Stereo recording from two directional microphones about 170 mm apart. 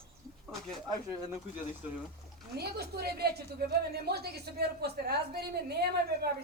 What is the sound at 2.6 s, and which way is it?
A woman's voice, 70° right (ahead or behind).